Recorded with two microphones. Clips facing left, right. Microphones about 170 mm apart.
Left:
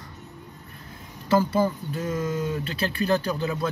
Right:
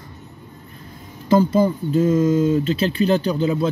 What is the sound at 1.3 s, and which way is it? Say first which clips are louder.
Speech: right 6 dB; 20° right (ahead or behind).